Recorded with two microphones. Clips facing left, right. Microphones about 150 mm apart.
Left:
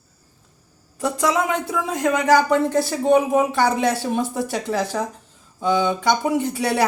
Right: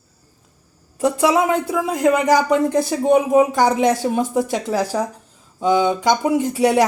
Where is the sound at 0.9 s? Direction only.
10° right (ahead or behind).